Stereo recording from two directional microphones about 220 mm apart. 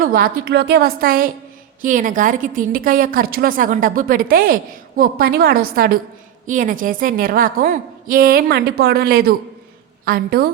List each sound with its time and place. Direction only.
0.0 s a woman's voice: 40° right (ahead or behind)